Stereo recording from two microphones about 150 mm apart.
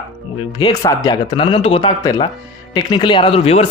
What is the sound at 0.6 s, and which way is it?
Speech, 25° left (ahead or behind).